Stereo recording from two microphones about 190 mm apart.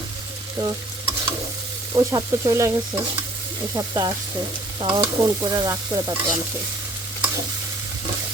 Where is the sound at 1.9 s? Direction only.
20° right (ahead or behind).